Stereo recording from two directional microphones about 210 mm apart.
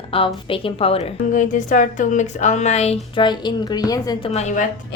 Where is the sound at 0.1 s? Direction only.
25° left (ahead or behind).